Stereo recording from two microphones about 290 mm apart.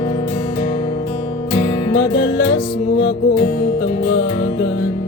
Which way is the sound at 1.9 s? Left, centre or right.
Left.